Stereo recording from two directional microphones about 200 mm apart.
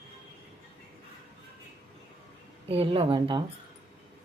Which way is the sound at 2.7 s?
25° right (ahead or behind).